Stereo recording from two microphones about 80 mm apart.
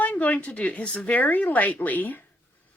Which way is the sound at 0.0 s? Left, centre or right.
Left.